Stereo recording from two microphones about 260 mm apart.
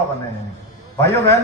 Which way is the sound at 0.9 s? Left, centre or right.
Centre.